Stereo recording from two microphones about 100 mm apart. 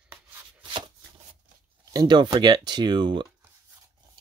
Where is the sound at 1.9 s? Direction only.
45° right (ahead or behind).